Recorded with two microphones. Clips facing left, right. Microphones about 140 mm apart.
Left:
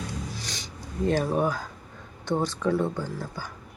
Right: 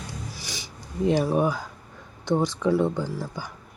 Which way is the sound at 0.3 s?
10° right (ahead or behind).